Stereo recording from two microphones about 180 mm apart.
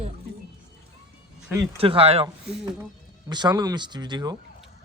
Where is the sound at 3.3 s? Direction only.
25° right (ahead or behind).